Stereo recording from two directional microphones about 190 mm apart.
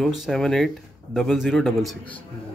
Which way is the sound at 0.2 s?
Centre (ahead or behind).